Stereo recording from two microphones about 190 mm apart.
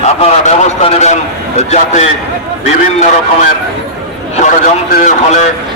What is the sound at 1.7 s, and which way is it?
Speech, 35° left (ahead or behind).